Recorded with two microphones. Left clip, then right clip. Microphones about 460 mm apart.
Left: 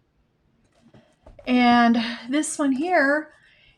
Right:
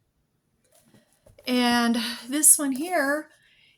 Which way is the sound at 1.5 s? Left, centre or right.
Right.